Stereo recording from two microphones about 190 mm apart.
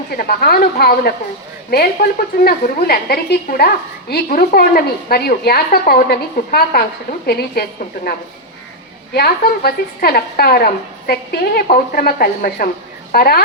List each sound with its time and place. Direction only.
0.2 s a woman's voice: 55° left (ahead or behind)
9.1 s a woman's voice: 55° left (ahead or behind)